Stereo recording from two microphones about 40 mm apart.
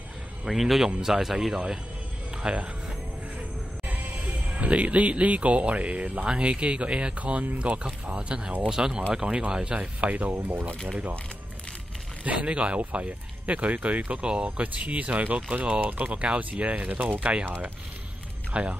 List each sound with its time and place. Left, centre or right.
0.5 s speech: centre
2.4 s speech: right
3.9 s speech: right
8.6 s speech: centre
9.7 s speech: right
12.3 s speech: right
14.2 s speech: right
14.6 s speech: right
18.5 s speech: right